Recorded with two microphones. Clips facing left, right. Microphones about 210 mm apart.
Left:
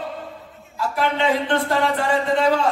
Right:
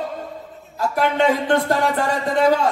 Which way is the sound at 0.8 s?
45° right (ahead or behind).